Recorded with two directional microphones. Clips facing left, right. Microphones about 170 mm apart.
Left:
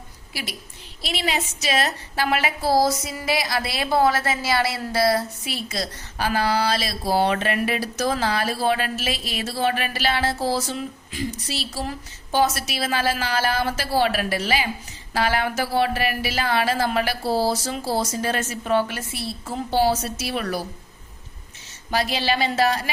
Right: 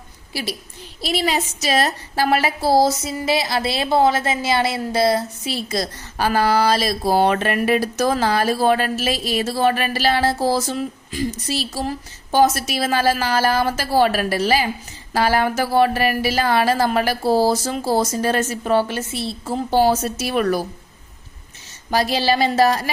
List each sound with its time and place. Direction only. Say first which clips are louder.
1.0 s a woman's voice: right 5 dB; 40° right (ahead or behind); by 5.5 s 20° right (ahead or behind)
5.6 s speech: right 5 dB; 40° right (ahead or behind); by 19.5 s 25° right (ahead or behind)
19.7 s speech: right 4 dB; 45° right (ahead or behind)
21.8 s speech: right 4 dB; 40° right (ahead or behind)